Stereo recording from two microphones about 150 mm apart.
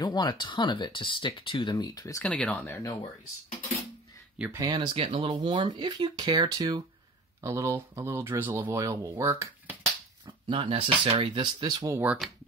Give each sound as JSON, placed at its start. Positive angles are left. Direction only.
{"t": 0.0, "sound": "speech", "side_deg": 30}
{"t": 2.2, "sound": "speech", "side_deg": 10}
{"t": 4.6, "sound": "speech", "side_deg": -30}
{"t": 10.2, "sound": "speech", "side_deg": -35}
{"t": 12.0, "sound": "speech", "side_deg": -10}